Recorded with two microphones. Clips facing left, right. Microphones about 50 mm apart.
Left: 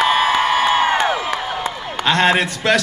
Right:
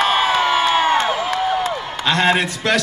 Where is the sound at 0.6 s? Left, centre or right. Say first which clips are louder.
Even; left.